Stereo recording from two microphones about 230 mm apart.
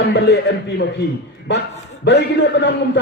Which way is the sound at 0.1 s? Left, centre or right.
Left.